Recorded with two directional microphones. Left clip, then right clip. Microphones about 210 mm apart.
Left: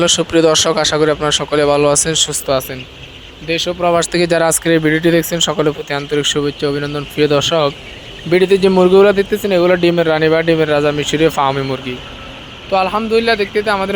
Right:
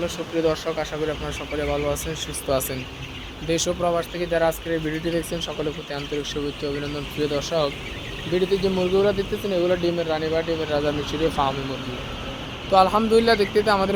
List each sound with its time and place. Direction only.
0.0 s speech: 40° left (ahead or behind)
2.5 s speech: 15° left (ahead or behind)
3.8 s speech: 25° left (ahead or behind)
4.1 s speech: 40° left (ahead or behind)
12.7 s speech: 5° left (ahead or behind)